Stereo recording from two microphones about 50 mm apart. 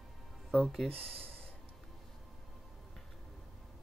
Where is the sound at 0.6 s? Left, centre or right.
Centre.